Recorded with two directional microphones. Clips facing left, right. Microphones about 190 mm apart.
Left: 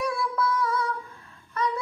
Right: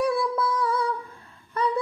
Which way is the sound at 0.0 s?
30° right (ahead or behind).